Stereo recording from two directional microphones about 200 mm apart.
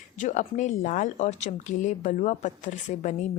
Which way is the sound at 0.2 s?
35° left (ahead or behind).